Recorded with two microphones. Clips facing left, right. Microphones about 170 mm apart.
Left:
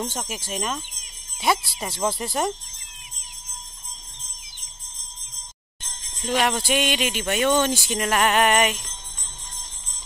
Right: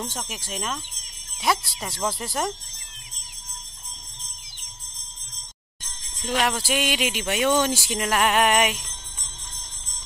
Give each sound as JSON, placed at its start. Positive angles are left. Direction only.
{"t": 0.0, "sound": "speech", "side_deg": 5}
{"t": 6.2, "sound": "speech", "side_deg": 0}